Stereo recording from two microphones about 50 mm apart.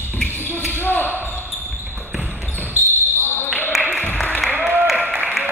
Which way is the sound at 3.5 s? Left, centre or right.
Left.